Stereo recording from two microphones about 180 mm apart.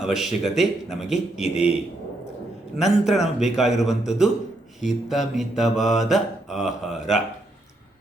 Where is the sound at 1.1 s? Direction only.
40° left (ahead or behind).